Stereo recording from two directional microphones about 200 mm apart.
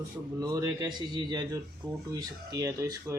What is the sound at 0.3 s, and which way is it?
Speech, 20° right (ahead or behind).